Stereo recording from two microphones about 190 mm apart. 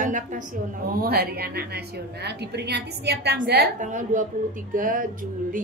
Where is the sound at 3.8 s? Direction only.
40° right (ahead or behind).